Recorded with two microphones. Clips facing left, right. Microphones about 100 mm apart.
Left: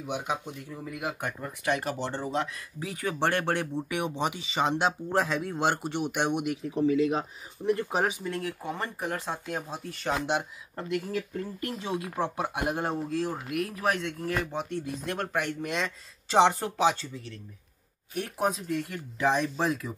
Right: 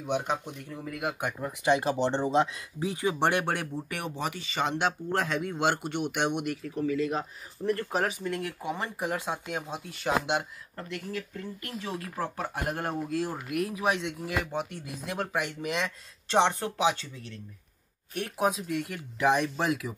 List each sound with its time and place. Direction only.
0.0 s speech: 5° left (ahead or behind)
1.9 s speech: 25° right (ahead or behind)
3.4 s speech: 5° right (ahead or behind)
6.6 s speech: 30° left (ahead or behind)
7.0 s speech: 5° left (ahead or behind)
10.8 s speech: 25° left (ahead or behind)
12.0 s speech: 15° left (ahead or behind)
12.9 s speech: 5° right (ahead or behind)